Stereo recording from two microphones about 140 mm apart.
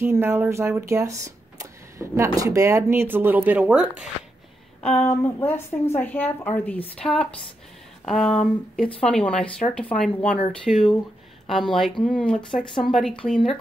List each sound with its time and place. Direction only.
0.0 s speech: 15° right (ahead or behind)
4.8 s a woman's voice: 15° left (ahead or behind)